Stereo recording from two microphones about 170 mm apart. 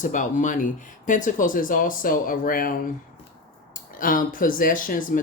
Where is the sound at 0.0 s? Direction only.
50° left (ahead or behind).